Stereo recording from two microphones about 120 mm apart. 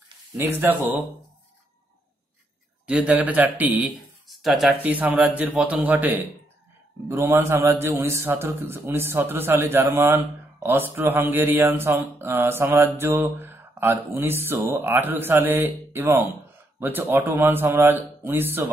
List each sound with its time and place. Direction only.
0.4 s speech: 20° right (ahead or behind)
2.9 s speech: 10° right (ahead or behind)
4.3 s speech: centre (ahead or behind)
4.8 s speech: 10° right (ahead or behind)